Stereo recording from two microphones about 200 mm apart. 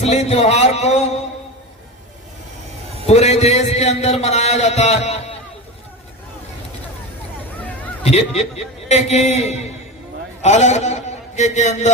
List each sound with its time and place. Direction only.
0.0 s a man's voice: 35° left (ahead or behind)
3.1 s a man's voice: 35° left (ahead or behind)
8.0 s a man's voice: 30° left (ahead or behind)